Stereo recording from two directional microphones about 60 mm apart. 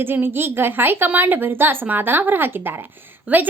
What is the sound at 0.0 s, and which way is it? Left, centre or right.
A woman's voice, right.